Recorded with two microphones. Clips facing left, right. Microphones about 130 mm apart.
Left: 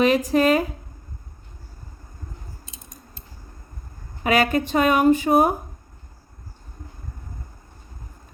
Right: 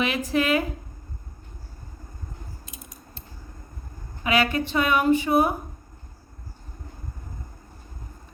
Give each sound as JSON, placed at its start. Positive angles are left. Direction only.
{"t": 0.0, "sound": "speech", "side_deg": 40}
{"t": 4.2, "sound": "speech", "side_deg": 45}